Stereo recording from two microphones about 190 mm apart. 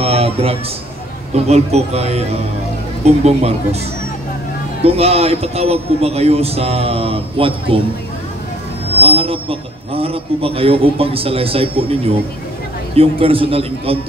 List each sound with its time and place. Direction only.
0.0 s a sound: 30° right (ahead or behind)
1.3 s a man's voice: 35° right (ahead or behind)
4.8 s a man's voice: 30° right (ahead or behind)
9.0 s a man's voice: 30° right (ahead or behind)